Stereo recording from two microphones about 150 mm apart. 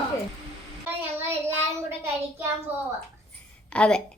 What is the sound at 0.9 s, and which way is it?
Child singing, 15° right (ahead or behind).